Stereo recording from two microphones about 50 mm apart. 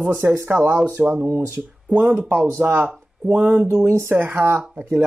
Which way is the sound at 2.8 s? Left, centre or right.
Right.